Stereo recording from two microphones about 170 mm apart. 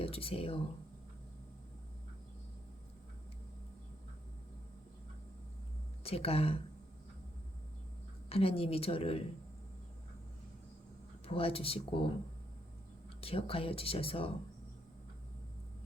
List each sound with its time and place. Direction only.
0.0 s speech: 35° left (ahead or behind)
6.0 s speech: 35° left (ahead or behind)
8.3 s speech: 35° left (ahead or behind)
11.3 s speech: 35° left (ahead or behind)
13.2 s speech: 35° left (ahead or behind)